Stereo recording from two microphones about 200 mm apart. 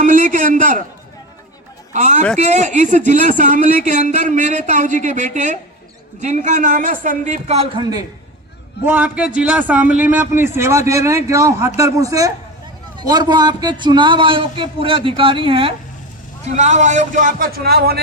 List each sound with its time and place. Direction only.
0.0 s a man's voice: 40° right (ahead or behind)
1.9 s a man's voice: 35° right (ahead or behind)
8.9 s a man's voice: 5° right (ahead or behind); by 18.0 s 50° right (ahead or behind)